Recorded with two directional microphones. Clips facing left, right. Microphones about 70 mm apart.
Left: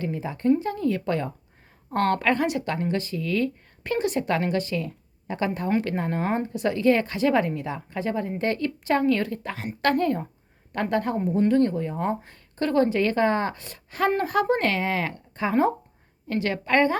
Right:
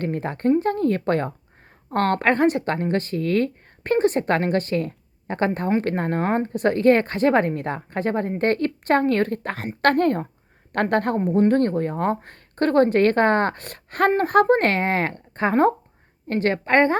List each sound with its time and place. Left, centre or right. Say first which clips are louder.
0.0 s a woman's voice: right 3 dB; right